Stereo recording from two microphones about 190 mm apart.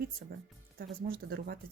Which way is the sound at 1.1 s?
55° right (ahead or behind).